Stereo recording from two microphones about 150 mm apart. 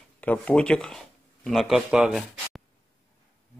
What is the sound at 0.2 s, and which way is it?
Speech, 10° left (ahead or behind).